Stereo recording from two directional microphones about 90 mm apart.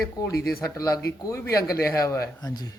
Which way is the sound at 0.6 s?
40° left (ahead or behind).